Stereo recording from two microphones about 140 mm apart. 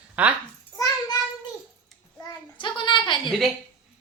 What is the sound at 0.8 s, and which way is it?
Child singing, 25° left (ahead or behind).